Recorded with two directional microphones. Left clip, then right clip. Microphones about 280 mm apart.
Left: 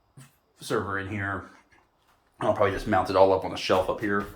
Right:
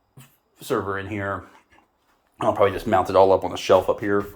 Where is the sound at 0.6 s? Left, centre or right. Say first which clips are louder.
Right 3 dB; right.